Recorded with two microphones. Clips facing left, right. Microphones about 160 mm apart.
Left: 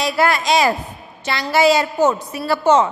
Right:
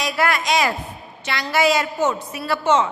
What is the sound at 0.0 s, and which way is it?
A woman's voice, 30° left (ahead or behind).